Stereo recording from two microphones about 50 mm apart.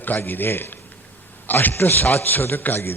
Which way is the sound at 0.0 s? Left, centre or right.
Left.